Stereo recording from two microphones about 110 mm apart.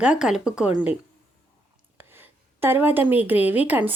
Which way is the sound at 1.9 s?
20° right (ahead or behind).